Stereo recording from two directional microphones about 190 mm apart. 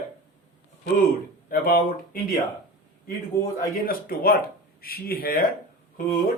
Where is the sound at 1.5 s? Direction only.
50° left (ahead or behind).